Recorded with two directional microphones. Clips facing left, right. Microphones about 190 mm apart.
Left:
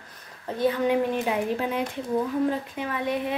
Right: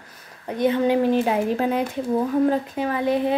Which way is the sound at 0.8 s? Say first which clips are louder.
Right 5 dB; 30° right (ahead or behind).